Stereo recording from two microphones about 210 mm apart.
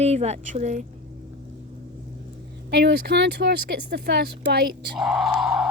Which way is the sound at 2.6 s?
55° right (ahead or behind).